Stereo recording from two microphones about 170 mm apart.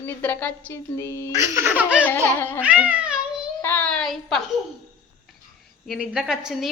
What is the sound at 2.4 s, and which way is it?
Speech, 10° left (ahead or behind).